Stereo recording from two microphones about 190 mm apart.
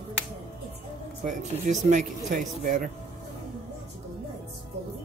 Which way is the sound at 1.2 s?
40° right (ahead or behind).